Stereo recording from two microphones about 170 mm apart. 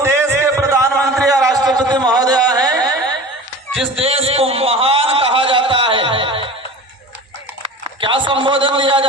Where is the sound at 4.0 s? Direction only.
35° right (ahead or behind).